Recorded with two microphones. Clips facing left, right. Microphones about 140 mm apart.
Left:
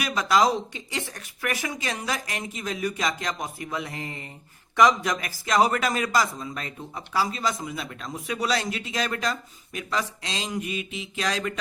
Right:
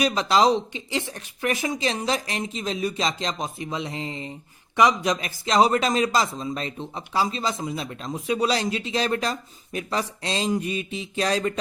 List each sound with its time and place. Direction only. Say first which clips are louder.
0.0 s a man's voice: right 2 dB; 25° right (ahead or behind)